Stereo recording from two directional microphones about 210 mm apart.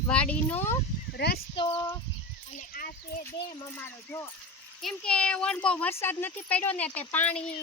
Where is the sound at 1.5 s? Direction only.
25° left (ahead or behind).